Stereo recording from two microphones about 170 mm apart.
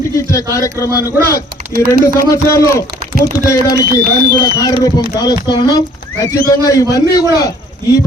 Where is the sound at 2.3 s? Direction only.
20° left (ahead or behind).